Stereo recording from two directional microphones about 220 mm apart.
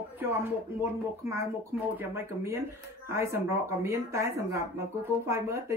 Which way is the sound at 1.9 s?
10° right (ahead or behind).